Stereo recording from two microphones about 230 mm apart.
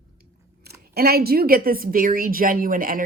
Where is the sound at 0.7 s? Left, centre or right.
Right.